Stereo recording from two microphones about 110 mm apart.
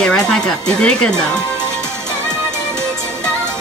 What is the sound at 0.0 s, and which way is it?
Speech, 5° left (ahead or behind).